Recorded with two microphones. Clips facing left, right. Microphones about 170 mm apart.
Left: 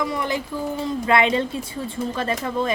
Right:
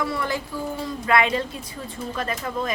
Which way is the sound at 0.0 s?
15° left (ahead or behind).